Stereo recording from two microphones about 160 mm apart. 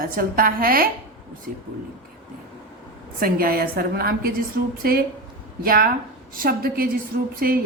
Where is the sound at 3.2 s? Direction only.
65° right (ahead or behind).